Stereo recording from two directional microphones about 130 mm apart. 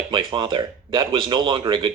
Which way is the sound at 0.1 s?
35° right (ahead or behind).